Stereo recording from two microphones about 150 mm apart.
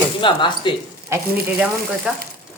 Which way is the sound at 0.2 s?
35° left (ahead or behind).